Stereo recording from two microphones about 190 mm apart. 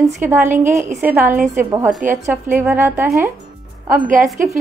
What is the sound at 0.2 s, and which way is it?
A woman's voice, 10° right (ahead or behind).